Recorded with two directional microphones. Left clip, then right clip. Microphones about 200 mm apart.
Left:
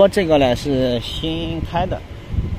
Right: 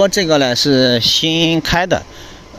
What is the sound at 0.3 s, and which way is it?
Speech, 20° right (ahead or behind).